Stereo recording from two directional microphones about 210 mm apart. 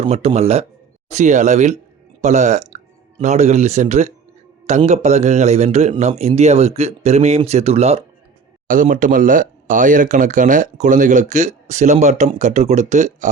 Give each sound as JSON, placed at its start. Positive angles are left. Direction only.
{"t": 0.0, "sound": "speech", "side_deg": -30}
{"t": 8.6, "sound": "speech", "side_deg": -40}